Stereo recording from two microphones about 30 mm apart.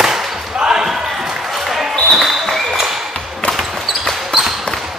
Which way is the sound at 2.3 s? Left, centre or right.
Centre.